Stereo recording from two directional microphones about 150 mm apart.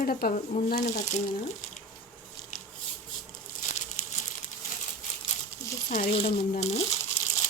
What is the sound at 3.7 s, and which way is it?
Crumpling, 55° left (ahead or behind).